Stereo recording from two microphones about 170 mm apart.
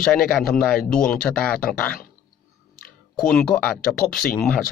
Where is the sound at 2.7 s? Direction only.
55° left (ahead or behind).